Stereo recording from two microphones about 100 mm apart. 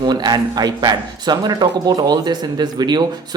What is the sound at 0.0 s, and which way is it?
A man's voice, 45° right (ahead or behind).